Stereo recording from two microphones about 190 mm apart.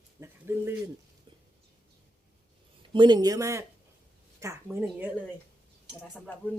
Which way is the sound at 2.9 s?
25° right (ahead or behind).